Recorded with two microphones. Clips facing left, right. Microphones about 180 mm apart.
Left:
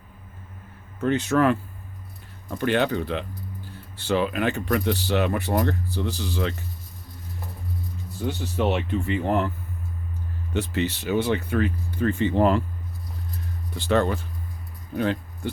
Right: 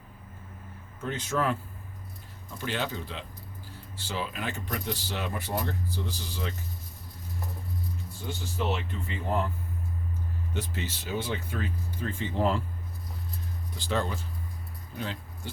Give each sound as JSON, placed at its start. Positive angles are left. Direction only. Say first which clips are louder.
{"t": 1.0, "sound": "speech", "louder": "left 9 dB", "side_deg": 70}
{"t": 8.3, "sound": "speech", "louder": "left 7 dB", "side_deg": 70}
{"t": 10.5, "sound": "speech", "louder": "left 11 dB", "side_deg": 70}
{"t": 13.7, "sound": "speech", "louder": "left 9 dB", "side_deg": 65}